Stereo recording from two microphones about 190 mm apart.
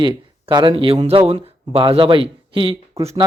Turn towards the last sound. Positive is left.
turn(degrees=-30)  # may be behind; listen again after turning